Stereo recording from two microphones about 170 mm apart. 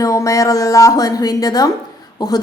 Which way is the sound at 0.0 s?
20° left (ahead or behind).